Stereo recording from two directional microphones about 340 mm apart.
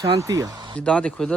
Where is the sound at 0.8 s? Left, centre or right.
Centre.